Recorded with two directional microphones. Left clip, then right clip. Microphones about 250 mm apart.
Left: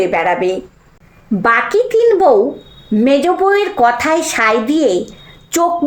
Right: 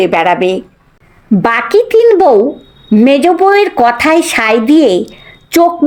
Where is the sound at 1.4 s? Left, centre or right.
Right.